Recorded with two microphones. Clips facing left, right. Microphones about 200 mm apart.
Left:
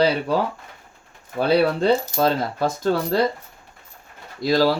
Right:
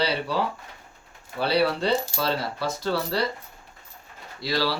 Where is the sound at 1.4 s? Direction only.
50° left (ahead or behind).